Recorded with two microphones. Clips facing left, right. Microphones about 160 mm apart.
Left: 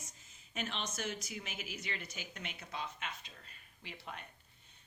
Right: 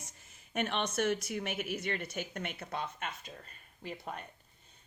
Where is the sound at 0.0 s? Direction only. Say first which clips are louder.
Right 3 dB; 65° right (ahead or behind).